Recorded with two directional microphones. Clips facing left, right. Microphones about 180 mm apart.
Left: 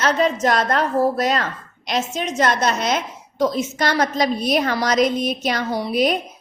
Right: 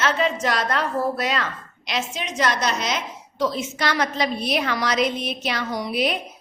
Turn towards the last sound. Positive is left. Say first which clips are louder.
# left 5 dB
turn(degrees=45)  # may be behind; listen again after turning